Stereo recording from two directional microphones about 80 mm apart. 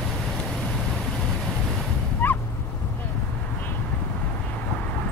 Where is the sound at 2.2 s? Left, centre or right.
Left.